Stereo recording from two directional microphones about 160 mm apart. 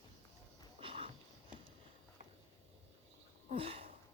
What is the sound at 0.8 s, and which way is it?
Sniff, 35° right (ahead or behind).